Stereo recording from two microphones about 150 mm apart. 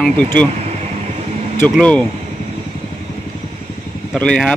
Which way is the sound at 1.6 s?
5° left (ahead or behind).